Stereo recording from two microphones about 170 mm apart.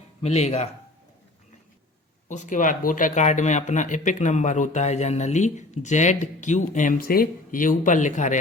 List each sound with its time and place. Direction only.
0.2 s speech: 40° left (ahead or behind)
2.3 s speech: 45° left (ahead or behind)